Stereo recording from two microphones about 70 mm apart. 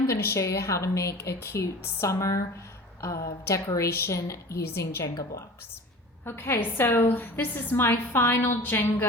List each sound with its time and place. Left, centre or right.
0.2 s a woman's voice: left
6.2 s a woman's voice: left